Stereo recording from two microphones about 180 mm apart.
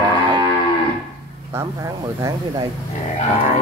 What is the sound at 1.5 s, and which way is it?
Speech, 15° right (ahead or behind).